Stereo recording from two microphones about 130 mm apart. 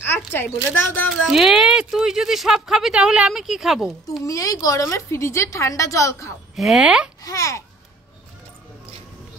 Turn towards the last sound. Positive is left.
turn(degrees=25)  # may be behind; listen again after turning